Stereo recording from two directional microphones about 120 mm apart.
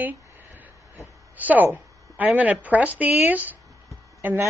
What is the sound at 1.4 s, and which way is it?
A woman's voice, 15° right (ahead or behind).